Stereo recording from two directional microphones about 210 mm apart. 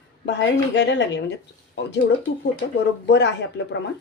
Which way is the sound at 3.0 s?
55° left (ahead or behind).